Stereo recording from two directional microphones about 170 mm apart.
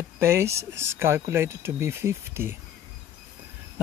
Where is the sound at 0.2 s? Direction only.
15° right (ahead or behind).